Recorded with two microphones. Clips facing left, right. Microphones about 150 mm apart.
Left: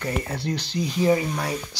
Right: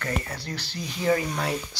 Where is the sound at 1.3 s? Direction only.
Centre (ahead or behind).